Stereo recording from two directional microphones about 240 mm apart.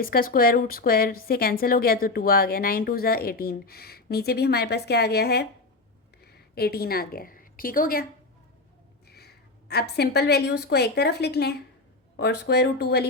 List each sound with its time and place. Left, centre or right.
0.0 s a woman's voice: left
9.0 s a sound: left
10.6 s speech: left